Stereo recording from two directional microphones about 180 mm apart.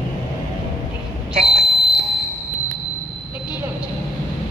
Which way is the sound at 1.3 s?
35° right (ahead or behind).